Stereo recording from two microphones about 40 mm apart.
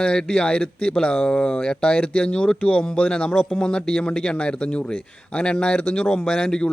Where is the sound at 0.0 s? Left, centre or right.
Left.